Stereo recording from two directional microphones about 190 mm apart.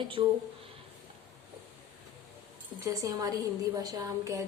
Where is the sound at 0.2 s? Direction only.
25° right (ahead or behind).